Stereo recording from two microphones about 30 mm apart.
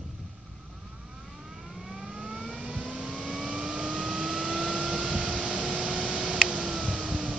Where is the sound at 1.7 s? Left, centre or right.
Centre.